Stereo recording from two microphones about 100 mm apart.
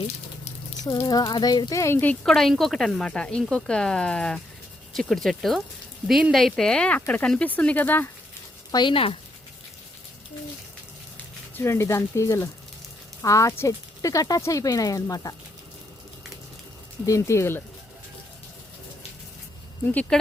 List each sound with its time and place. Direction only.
0.9 s speech: 40° left (ahead or behind); by 2.1 s 20° left (ahead or behind)
2.2 s speech: 5° left (ahead or behind)
8.7 s speech: 55° left (ahead or behind)
11.5 s speech: 25° left (ahead or behind)
17.1 s speech: 30° left (ahead or behind)
19.9 s speech: 15° left (ahead or behind)